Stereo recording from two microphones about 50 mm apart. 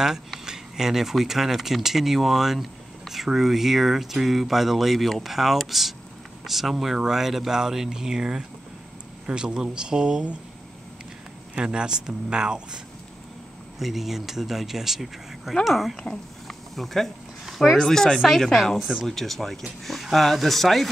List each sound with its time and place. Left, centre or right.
0.5 s speech: centre
11.5 s speech: centre
13.7 s speech: centre
16.4 s a sound: centre
17.7 s speech: centre